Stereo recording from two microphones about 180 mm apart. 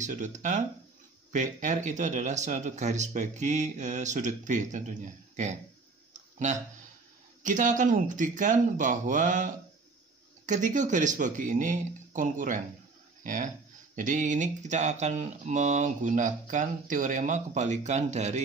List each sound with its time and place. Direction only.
0.0 s speech: 45° right (ahead or behind)